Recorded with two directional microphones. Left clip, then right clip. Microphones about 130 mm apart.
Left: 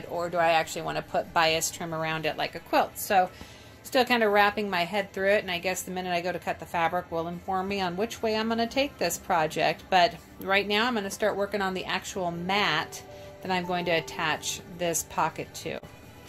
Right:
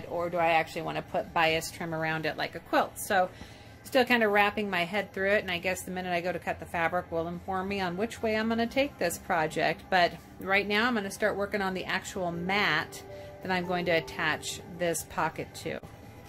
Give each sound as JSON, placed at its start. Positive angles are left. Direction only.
{"t": 0.1, "sound": "a woman's voice", "side_deg": 0}